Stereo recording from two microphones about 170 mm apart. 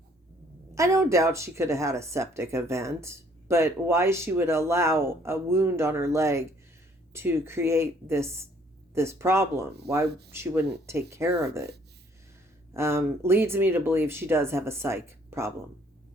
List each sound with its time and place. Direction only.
0.8 s speech: 20° right (ahead or behind)
10.1 s speech: 75° right (ahead or behind)
10.3 s speech: 15° right (ahead or behind)
12.7 s speech: 15° right (ahead or behind)